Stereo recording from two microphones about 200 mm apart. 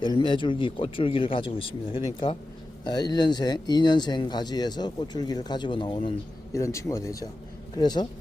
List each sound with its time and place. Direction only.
0.0 s speech: 25° left (ahead or behind)
6.5 s speech: 15° left (ahead or behind)